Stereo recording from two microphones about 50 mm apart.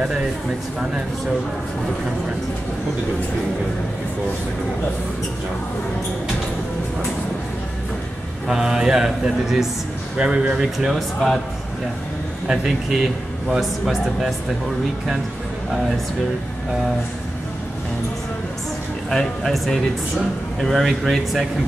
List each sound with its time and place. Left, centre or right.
8.5 s a man's voice: centre
10.1 s a man's voice: centre
12.4 s speech: centre
19.0 s speech: centre
20.8 s speech: centre